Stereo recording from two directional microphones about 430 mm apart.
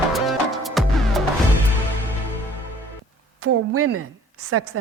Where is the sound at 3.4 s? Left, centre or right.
Right.